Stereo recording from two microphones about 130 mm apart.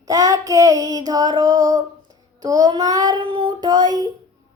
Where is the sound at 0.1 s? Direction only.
25° right (ahead or behind).